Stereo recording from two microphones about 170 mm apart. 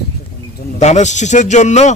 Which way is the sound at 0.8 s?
45° left (ahead or behind).